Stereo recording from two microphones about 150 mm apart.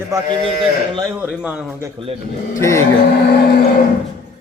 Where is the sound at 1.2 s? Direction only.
5° right (ahead or behind).